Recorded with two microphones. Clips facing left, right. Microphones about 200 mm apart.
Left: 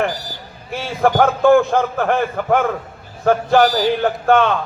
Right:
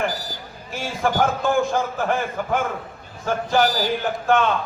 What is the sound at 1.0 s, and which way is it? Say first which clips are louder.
A man's voice: left 8 dB; 60° left (ahead or behind).